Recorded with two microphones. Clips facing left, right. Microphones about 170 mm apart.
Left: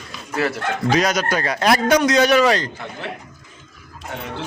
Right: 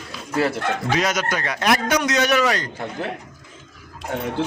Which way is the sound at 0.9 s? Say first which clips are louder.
Left 5 dB; 40° left (ahead or behind).